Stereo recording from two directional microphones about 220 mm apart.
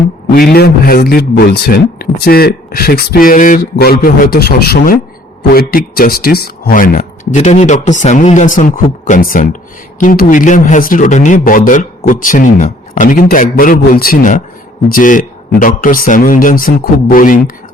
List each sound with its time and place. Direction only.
0.3 s a man's voice: 45° left (ahead or behind)